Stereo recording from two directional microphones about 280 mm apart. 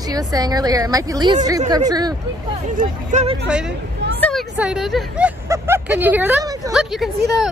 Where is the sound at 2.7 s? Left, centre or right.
Right.